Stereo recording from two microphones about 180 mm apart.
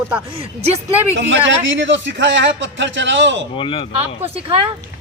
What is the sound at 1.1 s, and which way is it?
A man's voice, 90° right.